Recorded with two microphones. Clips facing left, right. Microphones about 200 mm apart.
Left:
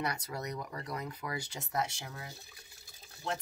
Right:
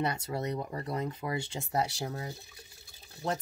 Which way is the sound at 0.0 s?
25° right (ahead or behind).